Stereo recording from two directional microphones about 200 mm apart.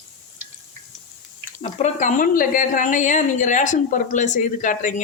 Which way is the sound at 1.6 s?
35° left (ahead or behind).